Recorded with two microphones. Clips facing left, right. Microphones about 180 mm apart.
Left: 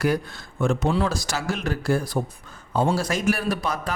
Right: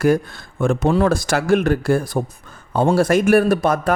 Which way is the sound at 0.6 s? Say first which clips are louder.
Right 6 dB; 55° right (ahead or behind).